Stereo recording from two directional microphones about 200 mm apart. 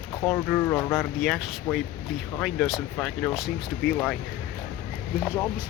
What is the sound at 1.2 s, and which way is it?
Speech, centre (ahead or behind).